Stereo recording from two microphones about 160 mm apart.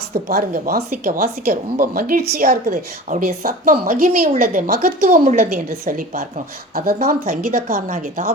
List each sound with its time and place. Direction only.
0.1 s a woman's voice: 70° right (ahead or behind)
7.9 s speech: 45° right (ahead or behind)